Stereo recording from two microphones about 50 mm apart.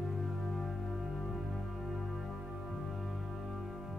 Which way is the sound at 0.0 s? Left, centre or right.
Centre.